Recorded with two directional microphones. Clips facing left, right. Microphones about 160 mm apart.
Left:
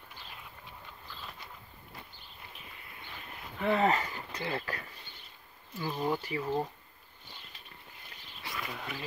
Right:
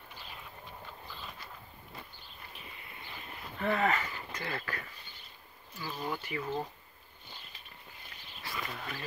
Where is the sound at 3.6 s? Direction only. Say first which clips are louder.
Left 3 dB; 25° left (ahead or behind).